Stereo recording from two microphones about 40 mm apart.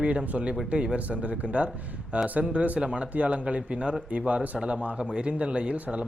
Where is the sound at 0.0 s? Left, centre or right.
Right.